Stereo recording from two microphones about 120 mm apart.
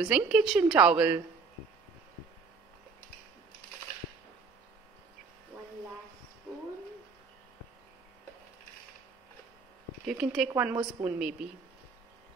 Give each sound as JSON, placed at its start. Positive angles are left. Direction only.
{"t": 0.0, "sound": "a woman's voice", "side_deg": -5}
{"t": 10.0, "sound": "speech", "side_deg": -5}
{"t": 10.5, "sound": "a woman's voice", "side_deg": -15}